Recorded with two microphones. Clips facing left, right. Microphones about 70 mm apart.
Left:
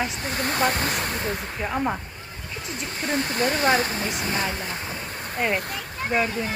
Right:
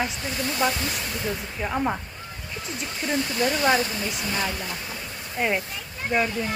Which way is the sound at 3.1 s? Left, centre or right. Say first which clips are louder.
Left 1 dB; left.